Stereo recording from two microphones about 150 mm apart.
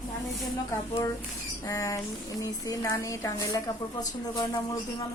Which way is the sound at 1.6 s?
25° left (ahead or behind).